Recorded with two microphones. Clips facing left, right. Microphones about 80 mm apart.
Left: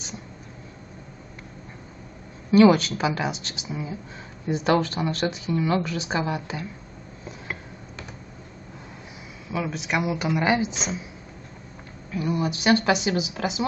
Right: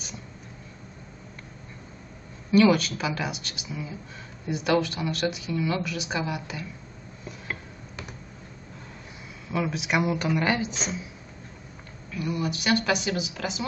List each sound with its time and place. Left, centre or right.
2.5 s a woman's voice: left
9.5 s a woman's voice: centre
12.1 s a woman's voice: left